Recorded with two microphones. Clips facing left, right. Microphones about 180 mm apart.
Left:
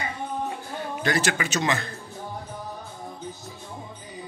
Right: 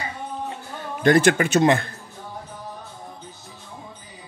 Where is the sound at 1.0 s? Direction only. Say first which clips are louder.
Right 10 dB; 50° right (ahead or behind).